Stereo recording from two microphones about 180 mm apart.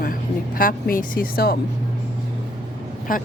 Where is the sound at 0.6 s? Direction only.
50° left (ahead or behind).